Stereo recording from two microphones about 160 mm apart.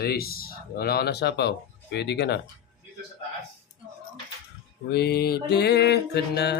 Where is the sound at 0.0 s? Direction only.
70° left (ahead or behind); by 2.4 s 90° left.